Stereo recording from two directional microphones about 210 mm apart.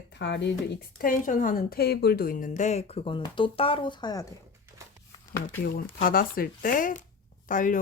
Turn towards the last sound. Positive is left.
turn(degrees=40)  # may be behind; listen again after turning